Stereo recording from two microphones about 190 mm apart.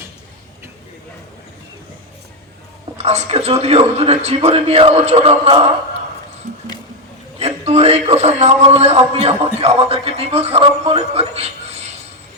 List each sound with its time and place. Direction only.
3.0 s a man's voice: 35° right (ahead or behind)
6.5 s squish: 45° right (ahead or behind)
7.3 s a man's voice: 35° right (ahead or behind)